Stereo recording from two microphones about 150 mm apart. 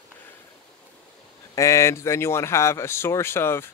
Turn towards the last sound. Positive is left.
turn(degrees=15)  # may be behind; listen again after turning